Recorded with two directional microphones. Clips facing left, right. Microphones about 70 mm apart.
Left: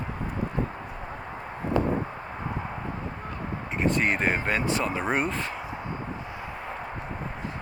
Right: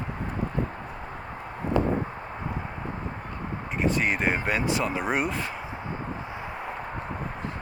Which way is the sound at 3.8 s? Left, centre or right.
Centre.